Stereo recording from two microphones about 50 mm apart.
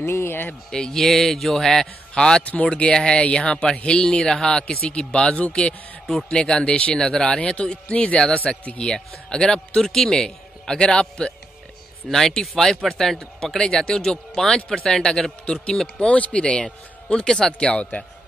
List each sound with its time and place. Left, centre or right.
0.0 s speech: left
0.7 s a man's voice: centre
2.4 s a man's voice: left
12.1 s a man's voice: centre